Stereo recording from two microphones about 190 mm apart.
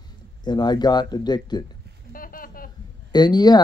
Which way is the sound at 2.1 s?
45° left (ahead or behind).